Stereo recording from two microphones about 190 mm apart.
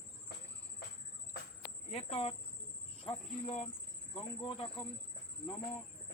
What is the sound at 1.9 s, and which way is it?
Speech, 30° left (ahead or behind).